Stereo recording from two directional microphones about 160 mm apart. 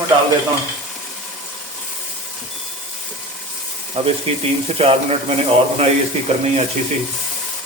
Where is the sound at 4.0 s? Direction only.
40° right (ahead or behind).